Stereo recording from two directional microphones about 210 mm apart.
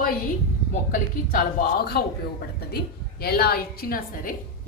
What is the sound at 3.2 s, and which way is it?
Speech, 45° left (ahead or behind).